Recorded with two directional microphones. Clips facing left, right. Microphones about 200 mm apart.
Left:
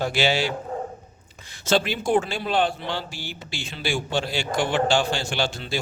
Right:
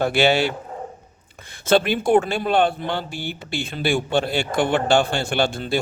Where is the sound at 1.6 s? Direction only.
55° right (ahead or behind).